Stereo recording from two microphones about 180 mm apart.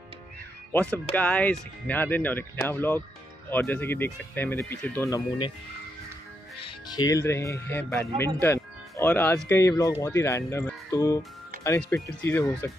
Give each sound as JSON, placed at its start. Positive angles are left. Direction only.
{"t": 0.7, "sound": "speech", "side_deg": 10}
{"t": 6.6, "sound": "speech", "side_deg": 20}
{"t": 8.4, "sound": "music", "side_deg": 10}
{"t": 9.5, "sound": "speech", "side_deg": 15}